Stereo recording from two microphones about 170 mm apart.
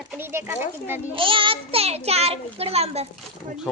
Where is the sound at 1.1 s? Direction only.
30° right (ahead or behind).